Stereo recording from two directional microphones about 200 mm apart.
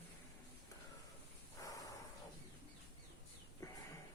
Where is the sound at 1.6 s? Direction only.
15° left (ahead or behind).